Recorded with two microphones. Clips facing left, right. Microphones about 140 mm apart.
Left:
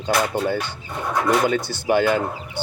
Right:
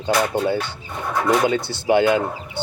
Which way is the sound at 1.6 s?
25° right (ahead or behind).